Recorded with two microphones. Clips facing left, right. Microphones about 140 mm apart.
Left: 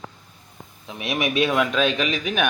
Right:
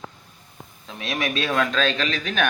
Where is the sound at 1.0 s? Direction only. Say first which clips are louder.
Left 4 dB; 20° left (ahead or behind).